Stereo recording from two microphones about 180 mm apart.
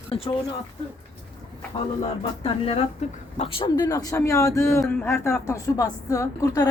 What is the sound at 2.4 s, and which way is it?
A woman's voice, 35° left (ahead or behind).